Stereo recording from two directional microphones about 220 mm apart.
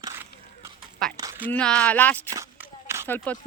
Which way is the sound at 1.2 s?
15° right (ahead or behind).